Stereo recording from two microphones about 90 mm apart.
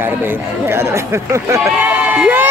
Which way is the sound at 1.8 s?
15° right (ahead or behind).